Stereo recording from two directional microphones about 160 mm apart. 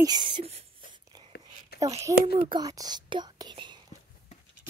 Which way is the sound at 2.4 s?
30° right (ahead or behind).